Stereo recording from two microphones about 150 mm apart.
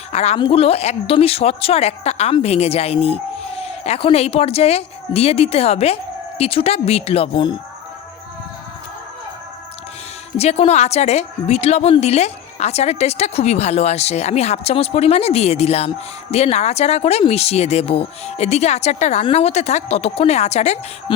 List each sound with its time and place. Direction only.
0.1 s a woman's voice: 45° left (ahead or behind)
10.3 s a woman's voice: 45° left (ahead or behind)